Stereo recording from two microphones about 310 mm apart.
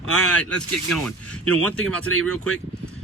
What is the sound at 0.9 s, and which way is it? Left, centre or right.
Speech, centre.